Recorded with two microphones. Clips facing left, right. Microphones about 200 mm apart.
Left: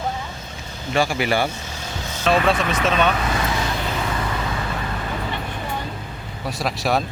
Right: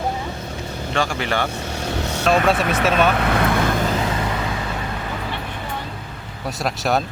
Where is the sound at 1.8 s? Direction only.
65° right (ahead or behind).